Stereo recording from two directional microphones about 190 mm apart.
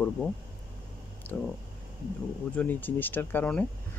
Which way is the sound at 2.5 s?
10° left (ahead or behind).